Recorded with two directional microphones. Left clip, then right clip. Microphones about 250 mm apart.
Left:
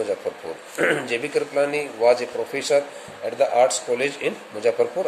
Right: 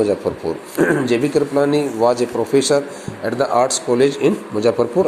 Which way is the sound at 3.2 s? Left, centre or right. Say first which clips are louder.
Right 2 dB; right.